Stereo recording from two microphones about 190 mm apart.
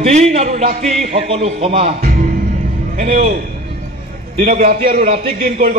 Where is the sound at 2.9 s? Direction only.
40° right (ahead or behind).